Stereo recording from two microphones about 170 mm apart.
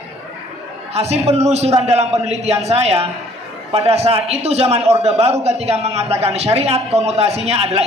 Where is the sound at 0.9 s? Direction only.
40° right (ahead or behind).